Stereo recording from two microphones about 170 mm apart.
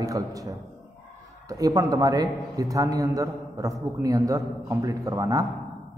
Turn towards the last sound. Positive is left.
turn(degrees=-20)  # may be behind; listen again after turning